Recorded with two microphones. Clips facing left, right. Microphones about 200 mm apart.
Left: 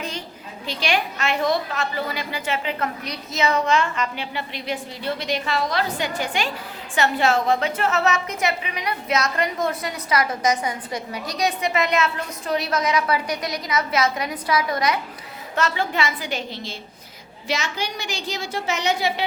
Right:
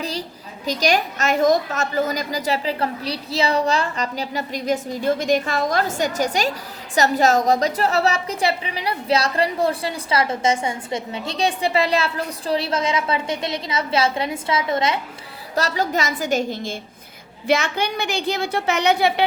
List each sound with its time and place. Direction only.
0.0 s a woman's voice: 35° right (ahead or behind)
15.5 s a woman's voice: 40° right (ahead or behind); by 19.2 s 60° right (ahead or behind)